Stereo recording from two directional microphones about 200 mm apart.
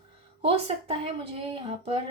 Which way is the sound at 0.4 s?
30° right (ahead or behind).